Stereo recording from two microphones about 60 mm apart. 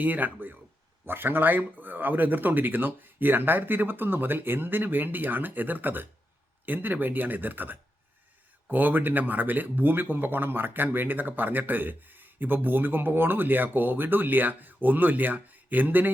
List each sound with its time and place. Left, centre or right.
0.0 s speech: right